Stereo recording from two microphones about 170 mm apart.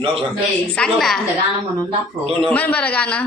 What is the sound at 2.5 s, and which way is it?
Speech, 10° left (ahead or behind).